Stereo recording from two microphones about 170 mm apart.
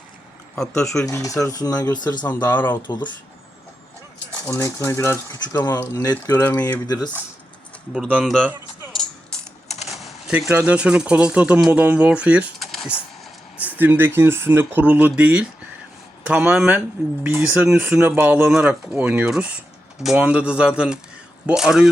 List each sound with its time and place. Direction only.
0.5 s speech: 5° left (ahead or behind)
1.0 s speech: 20° left (ahead or behind)
2.5 s speech: 10° left (ahead or behind)
2.8 s speech: 25° left (ahead or behind)
4.4 s speech: 15° left (ahead or behind)
6.8 s speech: 25° left (ahead or behind)
8.1 s speech: centre (ahead or behind)
8.9 s music: centre (ahead or behind)
9.6 s typing: 40° left (ahead or behind)
9.9 s speech: centre (ahead or behind)
13.6 s speech: 10° right (ahead or behind)